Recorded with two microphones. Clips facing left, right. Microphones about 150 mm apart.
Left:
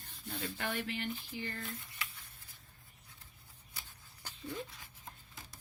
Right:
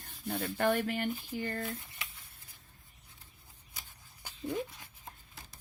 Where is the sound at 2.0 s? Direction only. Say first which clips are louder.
Left 1 dB; 20° right (ahead or behind).